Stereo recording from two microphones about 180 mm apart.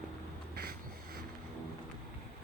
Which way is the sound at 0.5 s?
55° right (ahead or behind).